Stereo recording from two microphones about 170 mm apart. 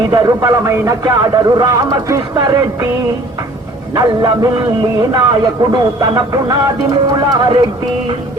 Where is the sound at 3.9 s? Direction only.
25° right (ahead or behind).